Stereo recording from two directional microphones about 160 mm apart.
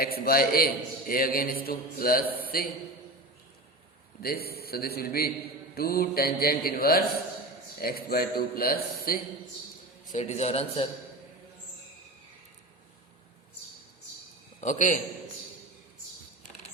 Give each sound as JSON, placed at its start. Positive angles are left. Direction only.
{"t": 0.0, "sound": "a man's voice", "side_deg": 70}
{"t": 4.2, "sound": "a man's voice", "side_deg": 75}
{"t": 10.1, "sound": "a man's voice", "side_deg": 45}
{"t": 14.6, "sound": "a man's voice", "side_deg": 50}